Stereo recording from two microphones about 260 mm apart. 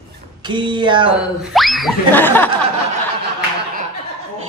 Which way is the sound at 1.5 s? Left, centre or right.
Centre.